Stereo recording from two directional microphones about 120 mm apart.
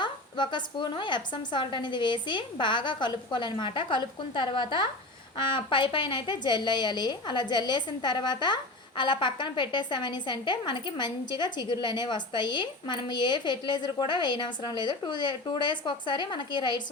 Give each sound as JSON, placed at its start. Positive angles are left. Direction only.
{"t": 0.0, "sound": "a woman's voice", "side_deg": 40}